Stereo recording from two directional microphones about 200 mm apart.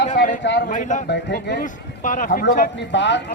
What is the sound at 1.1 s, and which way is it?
Speech, 50° left (ahead or behind).